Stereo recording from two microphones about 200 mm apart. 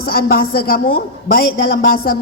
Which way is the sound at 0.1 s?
50° left (ahead or behind).